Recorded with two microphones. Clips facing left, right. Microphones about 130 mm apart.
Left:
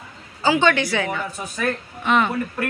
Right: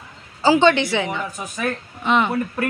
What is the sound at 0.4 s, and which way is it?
Speech, 30° right (ahead or behind).